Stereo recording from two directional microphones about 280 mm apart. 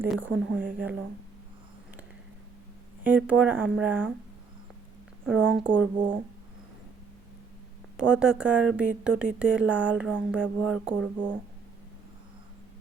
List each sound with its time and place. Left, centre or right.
0.0 s speech: centre
3.0 s speech: centre
5.3 s speech: right
5.6 s speech: centre
7.9 s speech: centre